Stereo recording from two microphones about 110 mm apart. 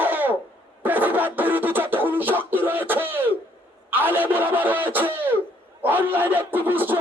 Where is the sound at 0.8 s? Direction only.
15° right (ahead or behind).